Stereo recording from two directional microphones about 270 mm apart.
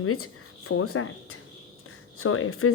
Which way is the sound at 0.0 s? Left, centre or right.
Left.